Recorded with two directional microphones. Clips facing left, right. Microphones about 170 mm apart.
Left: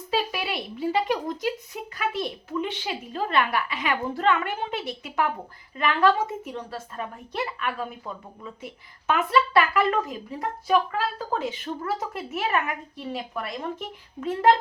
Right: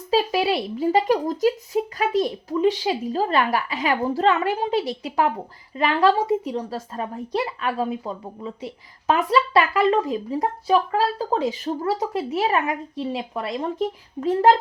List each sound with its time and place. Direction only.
0.1 s a woman's voice: 35° right (ahead or behind)